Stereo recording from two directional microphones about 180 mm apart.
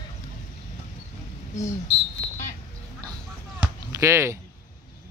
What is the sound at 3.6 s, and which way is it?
Basketball bounce, 15° right (ahead or behind).